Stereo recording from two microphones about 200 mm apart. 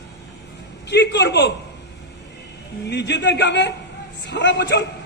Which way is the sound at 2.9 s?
60° left (ahead or behind).